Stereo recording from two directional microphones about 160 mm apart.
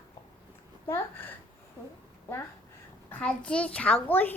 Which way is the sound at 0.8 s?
15° left (ahead or behind).